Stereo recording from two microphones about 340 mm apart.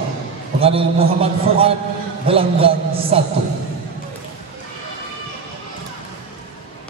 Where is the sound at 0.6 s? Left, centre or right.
Centre.